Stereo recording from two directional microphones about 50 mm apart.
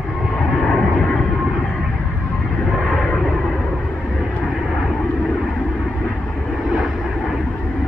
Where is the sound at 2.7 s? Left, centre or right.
Centre.